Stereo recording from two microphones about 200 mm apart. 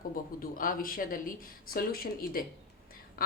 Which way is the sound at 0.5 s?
45° left (ahead or behind).